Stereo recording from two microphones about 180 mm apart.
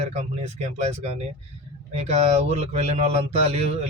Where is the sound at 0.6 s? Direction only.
35° right (ahead or behind).